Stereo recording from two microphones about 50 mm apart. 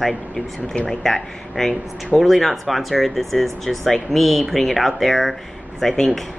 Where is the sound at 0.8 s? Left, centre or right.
Centre.